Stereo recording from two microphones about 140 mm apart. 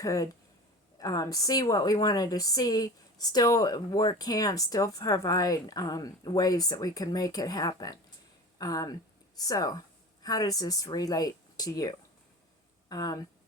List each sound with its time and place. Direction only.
0.0 s a woman's voice: 25° left (ahead or behind)